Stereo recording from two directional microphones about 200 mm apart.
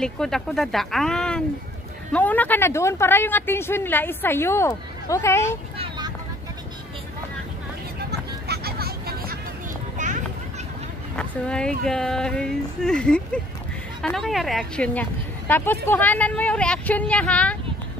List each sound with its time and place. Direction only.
0.0 s speech: centre (ahead or behind)
5.8 s vehicle: 20° right (ahead or behind)
8.5 s vehicle: 50° right (ahead or behind)
9.9 s children playing: 40° right (ahead or behind)
11.1 s speech: 5° left (ahead or behind)